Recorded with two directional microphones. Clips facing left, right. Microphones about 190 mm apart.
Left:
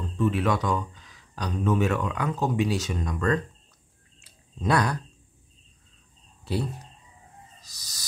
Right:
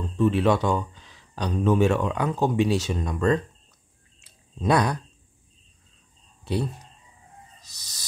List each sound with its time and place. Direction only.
0.2 s speech: 30° right (ahead or behind)
4.2 s a sound: 20° right (ahead or behind)
7.6 s speech: 25° right (ahead or behind)